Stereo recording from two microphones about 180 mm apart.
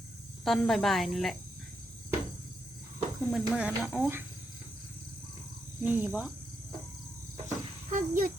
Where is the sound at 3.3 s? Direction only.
5° right (ahead or behind).